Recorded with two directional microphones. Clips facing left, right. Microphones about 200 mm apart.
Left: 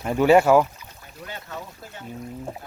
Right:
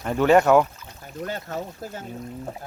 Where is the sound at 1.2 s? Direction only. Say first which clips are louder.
Right 6 dB; 40° right (ahead or behind).